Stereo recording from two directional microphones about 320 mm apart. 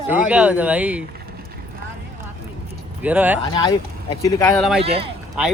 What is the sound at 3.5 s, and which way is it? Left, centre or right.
Speech, centre.